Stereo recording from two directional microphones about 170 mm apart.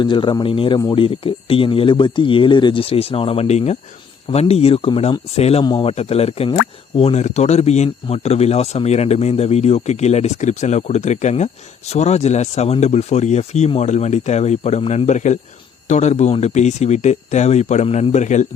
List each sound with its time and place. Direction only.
0.0 s speech: 30° left (ahead or behind); by 18.4 s 45° left (ahead or behind)